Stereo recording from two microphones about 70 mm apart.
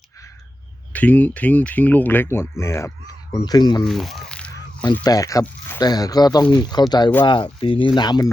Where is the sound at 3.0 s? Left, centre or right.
Left.